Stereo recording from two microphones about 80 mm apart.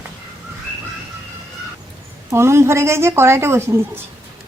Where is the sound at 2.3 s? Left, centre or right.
Right.